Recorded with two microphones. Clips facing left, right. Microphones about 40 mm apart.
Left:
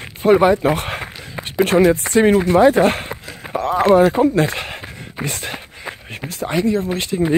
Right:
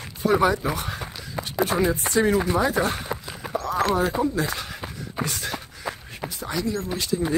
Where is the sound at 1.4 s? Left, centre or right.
Left.